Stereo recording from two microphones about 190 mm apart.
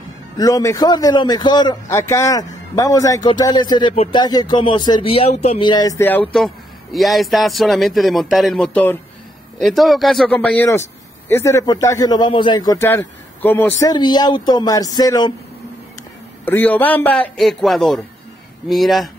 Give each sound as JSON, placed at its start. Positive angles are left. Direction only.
{"t": 0.4, "sound": "a man's voice", "side_deg": 20}
{"t": 16.4, "sound": "a man's voice", "side_deg": 10}